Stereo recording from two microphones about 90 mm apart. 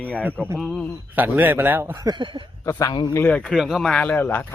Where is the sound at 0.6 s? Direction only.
5° left (ahead or behind).